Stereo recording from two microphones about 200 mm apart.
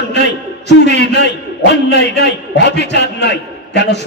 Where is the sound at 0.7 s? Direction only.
60° left (ahead or behind).